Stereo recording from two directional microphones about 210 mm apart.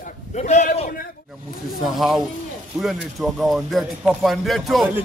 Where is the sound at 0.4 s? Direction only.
35° left (ahead or behind).